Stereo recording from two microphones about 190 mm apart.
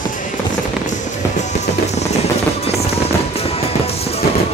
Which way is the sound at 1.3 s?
35° left (ahead or behind).